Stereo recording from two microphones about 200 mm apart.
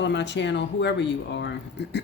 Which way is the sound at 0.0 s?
60° left (ahead or behind).